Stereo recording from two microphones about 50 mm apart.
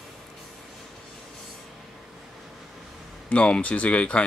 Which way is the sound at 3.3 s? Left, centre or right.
Left.